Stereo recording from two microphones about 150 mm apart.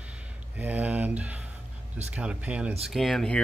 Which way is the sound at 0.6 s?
10° right (ahead or behind).